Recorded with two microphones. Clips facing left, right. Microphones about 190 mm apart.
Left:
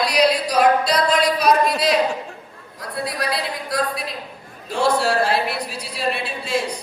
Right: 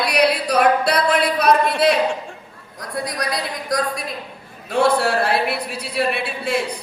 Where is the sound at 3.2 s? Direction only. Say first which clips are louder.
Even; 45° right (ahead or behind).